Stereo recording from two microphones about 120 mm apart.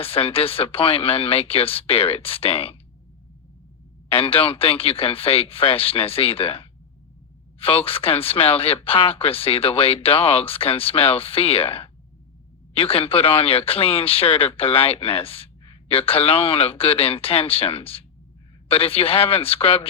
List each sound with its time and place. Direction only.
0.0 s speech: 50° left (ahead or behind)
4.1 s speech: 50° left (ahead or behind)